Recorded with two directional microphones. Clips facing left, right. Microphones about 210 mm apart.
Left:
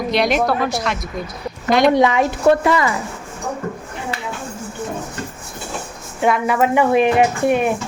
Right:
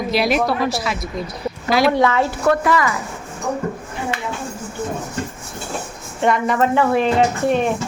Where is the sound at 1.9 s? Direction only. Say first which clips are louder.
Left 2 dB; 15° left (ahead or behind).